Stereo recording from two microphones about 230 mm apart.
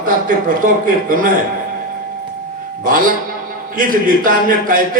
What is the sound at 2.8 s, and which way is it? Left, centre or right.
A man's voice, right.